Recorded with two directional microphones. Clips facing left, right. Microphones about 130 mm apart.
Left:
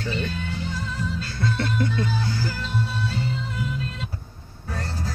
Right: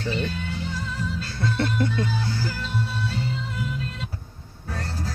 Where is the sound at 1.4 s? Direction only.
30° right (ahead or behind).